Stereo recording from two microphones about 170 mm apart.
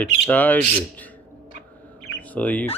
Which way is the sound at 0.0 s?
10° left (ahead or behind).